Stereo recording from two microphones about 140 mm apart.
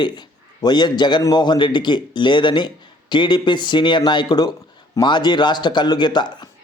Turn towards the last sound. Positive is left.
turn(degrees=30)  # may be behind; listen again after turning